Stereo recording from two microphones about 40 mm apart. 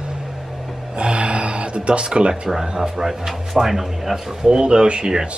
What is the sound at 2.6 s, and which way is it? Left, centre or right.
Speech, centre.